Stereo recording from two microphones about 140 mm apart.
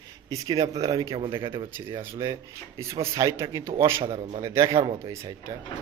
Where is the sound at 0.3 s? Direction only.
25° right (ahead or behind).